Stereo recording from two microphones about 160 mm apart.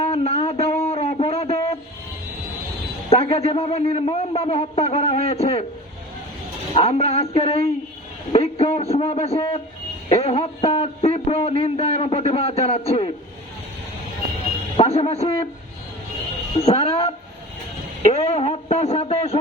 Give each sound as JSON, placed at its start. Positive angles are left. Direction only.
{"t": 0.0, "sound": "a sound", "side_deg": 40}
{"t": 3.1, "sound": "a man's voice", "side_deg": 40}
{"t": 6.7, "sound": "a man's voice", "side_deg": 40}
{"t": 14.8, "sound": "a man's voice", "side_deg": 40}
{"t": 16.6, "sound": "a man's voice", "side_deg": 40}
{"t": 18.1, "sound": "a man's voice", "side_deg": 40}